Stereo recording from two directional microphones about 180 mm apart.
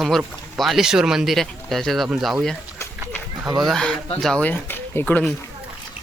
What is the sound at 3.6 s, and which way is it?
Speech, 5° left (ahead or behind).